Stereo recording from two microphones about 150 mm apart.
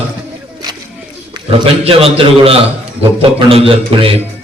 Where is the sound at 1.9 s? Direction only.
40° right (ahead or behind).